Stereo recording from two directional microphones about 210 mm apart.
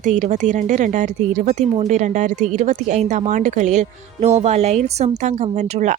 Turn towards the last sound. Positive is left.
turn(degrees=-35)  # may be behind; listen again after turning